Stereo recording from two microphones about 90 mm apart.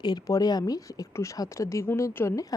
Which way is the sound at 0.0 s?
45° left (ahead or behind).